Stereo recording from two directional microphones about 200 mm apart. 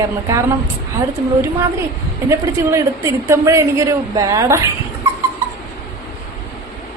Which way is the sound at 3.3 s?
15° right (ahead or behind).